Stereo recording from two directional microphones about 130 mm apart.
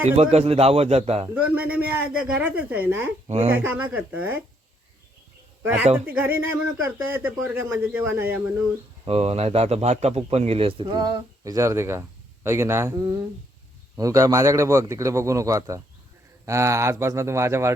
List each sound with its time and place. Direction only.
0.2 s a man's voice: 50° right (ahead or behind)
1.3 s speech: 10° right (ahead or behind)
3.2 s speech: 55° right (ahead or behind)
3.5 s speech: 15° right (ahead or behind)
5.6 s speech: 15° right (ahead or behind)
9.0 s a man's voice: 50° right (ahead or behind)
11.4 s a man's voice: 25° right (ahead or behind)